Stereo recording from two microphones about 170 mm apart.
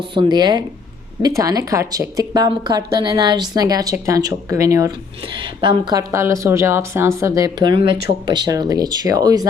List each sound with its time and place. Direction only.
0.1 s speech: 25° right (ahead or behind)